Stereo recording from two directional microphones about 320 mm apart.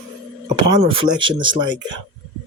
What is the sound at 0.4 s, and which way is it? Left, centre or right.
Speech, centre.